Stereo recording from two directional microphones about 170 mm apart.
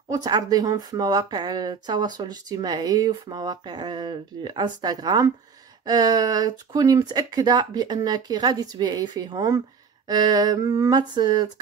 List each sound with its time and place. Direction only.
0.1 s speech: 25° right (ahead or behind)